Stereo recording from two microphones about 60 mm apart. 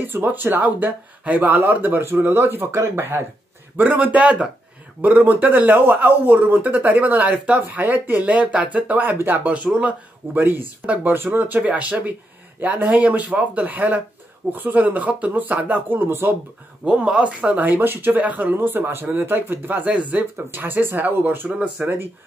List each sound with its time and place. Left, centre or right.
0.0 s speech: right
3.7 s a man's voice: right
9.8 s speech: right
10.4 s a man's voice: right
16.1 s speech: right
16.8 s a man's voice: centre
17.6 s speech: right
19.9 s a man's voice: right
20.3 s speech: right
21.5 s speech: centre